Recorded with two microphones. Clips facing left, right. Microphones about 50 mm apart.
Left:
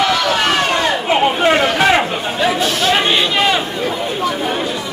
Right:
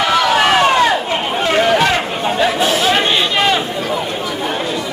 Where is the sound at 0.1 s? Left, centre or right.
Centre.